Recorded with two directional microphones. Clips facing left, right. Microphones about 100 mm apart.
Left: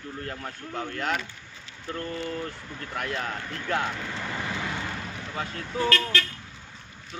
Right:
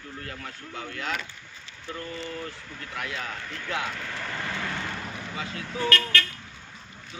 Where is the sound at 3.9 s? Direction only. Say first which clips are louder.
Left 1 dB; 15° left (ahead or behind).